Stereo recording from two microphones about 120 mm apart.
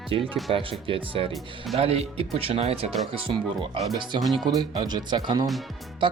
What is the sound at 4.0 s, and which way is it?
Speech, 40° right (ahead or behind).